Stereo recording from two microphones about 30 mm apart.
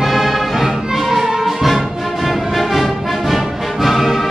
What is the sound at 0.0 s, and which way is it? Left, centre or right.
Music, centre.